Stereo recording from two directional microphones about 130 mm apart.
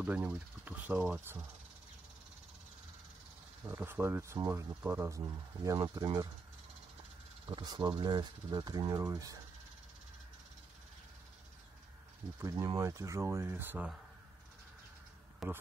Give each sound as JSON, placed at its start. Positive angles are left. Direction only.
{"t": 0.0, "sound": "speech", "side_deg": -10}
{"t": 3.6, "sound": "speech", "side_deg": -15}
{"t": 7.4, "sound": "speech", "side_deg": -35}
{"t": 12.4, "sound": "speech", "side_deg": -30}
{"t": 15.4, "sound": "speech", "side_deg": 0}